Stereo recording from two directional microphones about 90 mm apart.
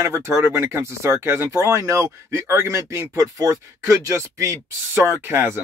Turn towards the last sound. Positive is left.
turn(degrees=-25)  # may be behind; listen again after turning